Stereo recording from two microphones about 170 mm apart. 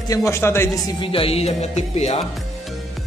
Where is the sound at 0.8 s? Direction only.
30° left (ahead or behind).